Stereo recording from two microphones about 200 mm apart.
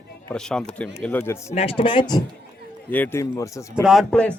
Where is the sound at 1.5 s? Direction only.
30° left (ahead or behind).